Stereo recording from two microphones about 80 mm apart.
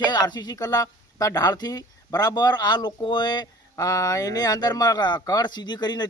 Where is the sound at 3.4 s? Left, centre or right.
Left.